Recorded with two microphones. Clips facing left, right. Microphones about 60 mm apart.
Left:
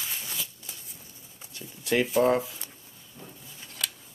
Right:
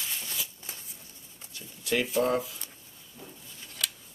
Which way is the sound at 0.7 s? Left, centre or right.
Right.